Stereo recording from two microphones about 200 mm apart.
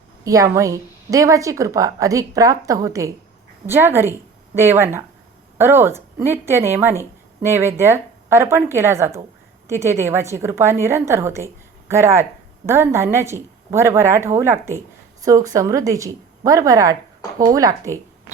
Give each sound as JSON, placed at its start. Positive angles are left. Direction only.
{"t": 0.3, "sound": "speech", "side_deg": -15}